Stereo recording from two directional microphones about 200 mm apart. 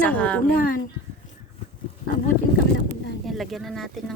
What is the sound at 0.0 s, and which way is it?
Speech, 5° left (ahead or behind).